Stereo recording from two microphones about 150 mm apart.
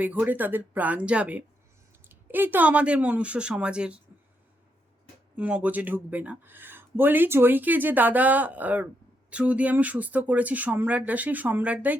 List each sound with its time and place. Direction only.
0.0 s speech: 10° right (ahead or behind)
5.4 s speech: 10° right (ahead or behind)